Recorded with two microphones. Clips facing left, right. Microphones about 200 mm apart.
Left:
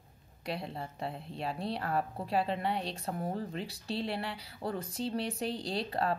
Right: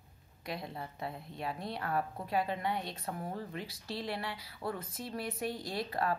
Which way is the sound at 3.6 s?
70° left (ahead or behind).